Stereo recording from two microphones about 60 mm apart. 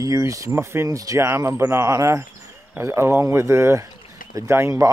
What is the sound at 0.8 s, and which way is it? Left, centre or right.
Speech, right.